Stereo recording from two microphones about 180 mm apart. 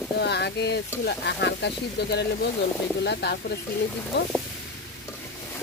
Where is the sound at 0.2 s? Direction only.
65° left (ahead or behind).